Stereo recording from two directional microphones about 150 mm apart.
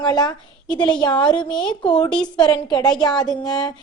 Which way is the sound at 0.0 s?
30° left (ahead or behind).